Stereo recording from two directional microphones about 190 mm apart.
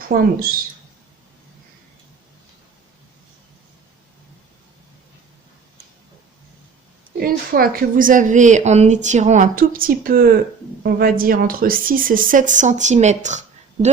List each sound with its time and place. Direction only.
0.1 s a woman's voice: 50° right (ahead or behind)
7.2 s a woman's voice: 50° right (ahead or behind)